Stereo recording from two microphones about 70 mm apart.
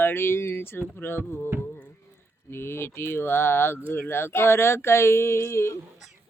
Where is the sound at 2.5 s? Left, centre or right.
Left.